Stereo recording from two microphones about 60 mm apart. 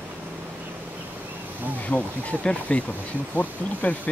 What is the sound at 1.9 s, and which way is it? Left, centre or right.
Speech, left.